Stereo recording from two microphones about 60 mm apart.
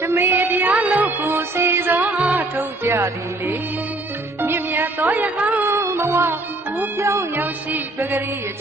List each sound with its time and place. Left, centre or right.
0.0 s music: right
1.3 s music: right
2.9 s music: right
4.4 s music: right
5.7 s music: right